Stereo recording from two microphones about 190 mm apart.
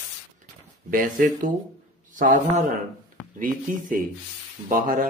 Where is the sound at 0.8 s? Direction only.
45° right (ahead or behind).